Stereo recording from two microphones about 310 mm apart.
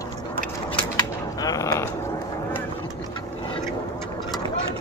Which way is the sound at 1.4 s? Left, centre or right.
Centre.